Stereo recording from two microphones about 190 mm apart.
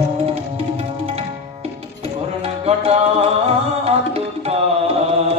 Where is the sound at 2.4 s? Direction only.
35° right (ahead or behind).